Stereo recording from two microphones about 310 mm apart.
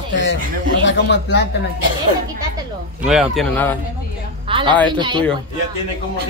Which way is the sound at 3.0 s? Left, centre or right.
Centre.